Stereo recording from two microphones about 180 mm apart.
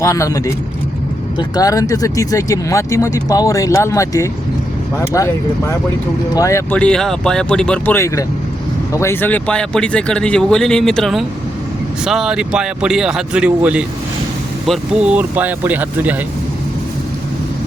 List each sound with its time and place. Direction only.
0.0 s speech: 15° left (ahead or behind); by 16.2 s 10° right (ahead or behind)